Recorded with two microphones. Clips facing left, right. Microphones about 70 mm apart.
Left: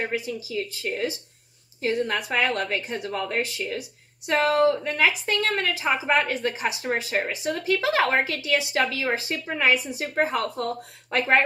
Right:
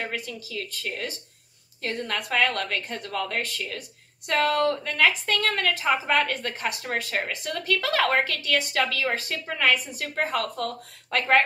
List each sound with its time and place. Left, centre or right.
0.0 s a woman's voice: centre